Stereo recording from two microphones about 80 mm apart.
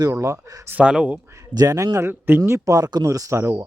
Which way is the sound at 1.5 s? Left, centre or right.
Right.